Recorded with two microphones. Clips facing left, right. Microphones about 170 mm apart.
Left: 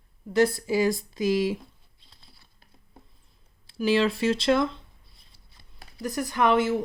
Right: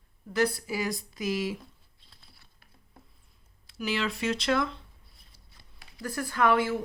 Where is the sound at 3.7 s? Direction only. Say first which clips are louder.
Left 8 dB; 30° left (ahead or behind).